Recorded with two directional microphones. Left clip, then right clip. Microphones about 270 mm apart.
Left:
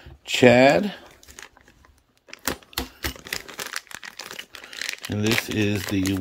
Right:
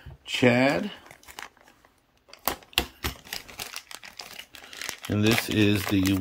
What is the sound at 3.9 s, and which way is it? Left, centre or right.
Crumpling, centre.